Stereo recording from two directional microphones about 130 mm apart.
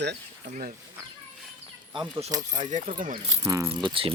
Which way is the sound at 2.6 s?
65° right (ahead or behind).